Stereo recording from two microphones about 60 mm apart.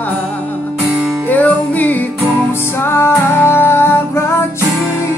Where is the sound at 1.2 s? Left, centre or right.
Left.